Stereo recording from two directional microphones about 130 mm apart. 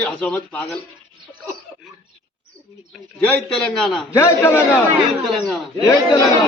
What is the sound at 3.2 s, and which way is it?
Speech, 5° left (ahead or behind).